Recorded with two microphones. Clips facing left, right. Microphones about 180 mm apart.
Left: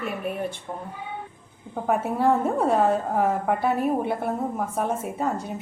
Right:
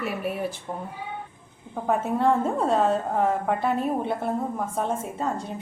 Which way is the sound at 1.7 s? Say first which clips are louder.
Even; 10° left (ahead or behind).